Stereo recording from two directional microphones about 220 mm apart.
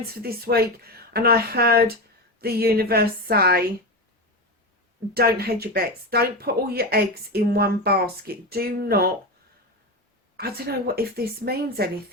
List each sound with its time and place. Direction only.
0.2 s speech: 45° right (ahead or behind)
5.1 s speech: 45° right (ahead or behind)
10.3 s speech: 45° right (ahead or behind)